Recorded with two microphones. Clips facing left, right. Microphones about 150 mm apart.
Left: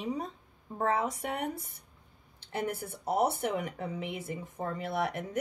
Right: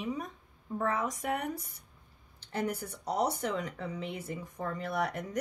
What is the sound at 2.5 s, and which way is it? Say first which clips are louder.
Speech: even; 25° left (ahead or behind).